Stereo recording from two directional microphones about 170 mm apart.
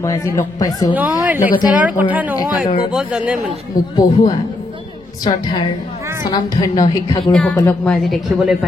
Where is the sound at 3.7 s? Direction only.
55° left (ahead or behind).